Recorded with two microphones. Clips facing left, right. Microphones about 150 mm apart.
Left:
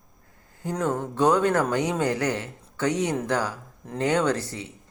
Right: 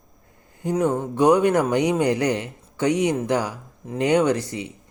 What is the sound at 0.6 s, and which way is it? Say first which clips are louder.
A man's voice: right 5 dB; 15° right (ahead or behind).